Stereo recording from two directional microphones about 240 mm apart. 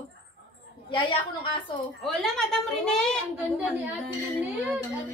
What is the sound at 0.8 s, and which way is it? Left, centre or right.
Speech, left.